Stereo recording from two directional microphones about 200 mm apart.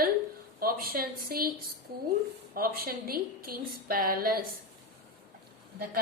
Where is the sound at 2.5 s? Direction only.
50° right (ahead or behind).